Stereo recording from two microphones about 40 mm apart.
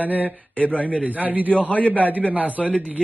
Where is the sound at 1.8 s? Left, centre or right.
Right.